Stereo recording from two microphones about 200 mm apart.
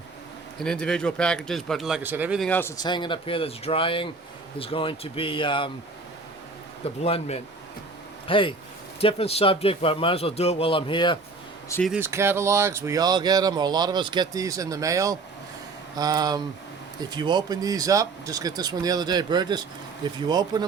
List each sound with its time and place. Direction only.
0.6 s speech: 5° left (ahead or behind)
2.4 s a man's voice: 10° left (ahead or behind); by 5.7 s 25° left (ahead or behind)
6.8 s a man's voice: 30° left (ahead or behind)
11.9 s speech: 10° right (ahead or behind)